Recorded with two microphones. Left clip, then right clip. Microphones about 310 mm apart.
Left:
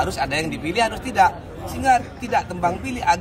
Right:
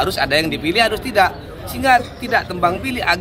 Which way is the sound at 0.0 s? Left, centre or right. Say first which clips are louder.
Right 6 dB; centre.